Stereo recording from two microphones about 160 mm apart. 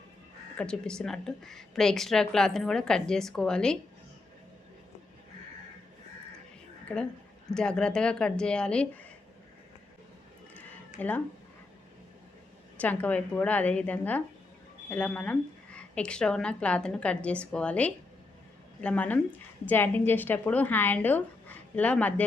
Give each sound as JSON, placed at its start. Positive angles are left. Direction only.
{"t": 0.5, "sound": "speech", "side_deg": 5}
{"t": 6.9, "sound": "a woman's voice", "side_deg": 5}
{"t": 11.0, "sound": "a woman's voice", "side_deg": 10}
{"t": 12.8, "sound": "a woman's voice", "side_deg": 10}